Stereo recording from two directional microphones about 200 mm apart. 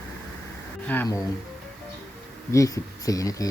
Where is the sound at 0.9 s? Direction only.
10° left (ahead or behind).